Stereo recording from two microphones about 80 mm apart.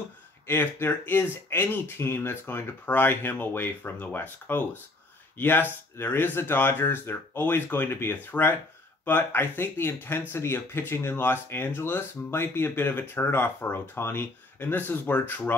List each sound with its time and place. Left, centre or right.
0.5 s speech: left